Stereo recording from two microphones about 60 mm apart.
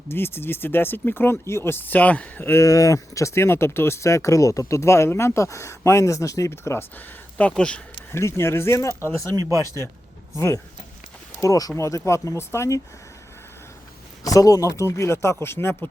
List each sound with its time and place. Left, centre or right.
0.1 s speech: left
2.5 s speech: left
6.5 s speech: left
7.5 s speech: centre
8.1 s speech: left
9.3 s speech: right
10.3 s speech: left
11.3 s speech: left
11.8 s speech: left
14.3 s speech: left
14.8 s speech: left